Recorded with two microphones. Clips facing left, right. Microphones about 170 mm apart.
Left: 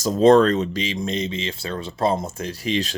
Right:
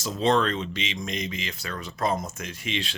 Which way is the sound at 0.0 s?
40° left (ahead or behind).